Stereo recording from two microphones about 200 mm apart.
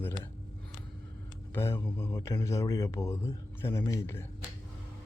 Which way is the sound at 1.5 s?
10° left (ahead or behind).